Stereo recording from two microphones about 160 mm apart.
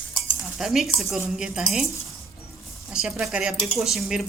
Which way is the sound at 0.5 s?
Centre (ahead or behind).